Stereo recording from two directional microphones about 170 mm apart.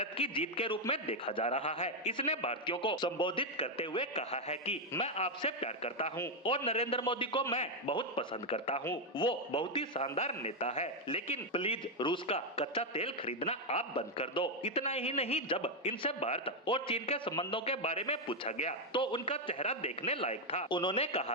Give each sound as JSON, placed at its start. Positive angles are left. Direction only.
{"t": 0.0, "sound": "a man's voice", "side_deg": 35}